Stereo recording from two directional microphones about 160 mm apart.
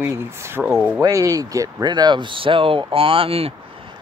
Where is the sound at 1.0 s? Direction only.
20° right (ahead or behind); by 3.5 s 35° right (ahead or behind).